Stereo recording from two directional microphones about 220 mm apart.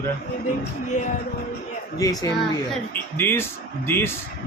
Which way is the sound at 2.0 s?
15° left (ahead or behind).